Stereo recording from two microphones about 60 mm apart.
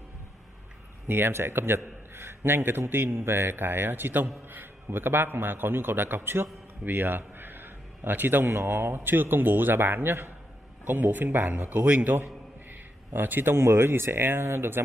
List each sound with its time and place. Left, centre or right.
1.0 s a man's voice: right